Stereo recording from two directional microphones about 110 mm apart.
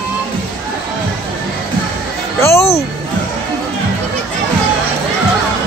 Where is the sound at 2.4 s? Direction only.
25° left (ahead or behind).